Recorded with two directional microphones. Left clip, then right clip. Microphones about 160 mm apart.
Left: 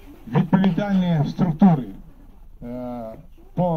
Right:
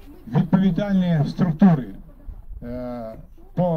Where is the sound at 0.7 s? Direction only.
55° right (ahead or behind).